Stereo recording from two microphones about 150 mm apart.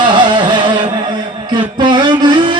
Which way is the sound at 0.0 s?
30° right (ahead or behind).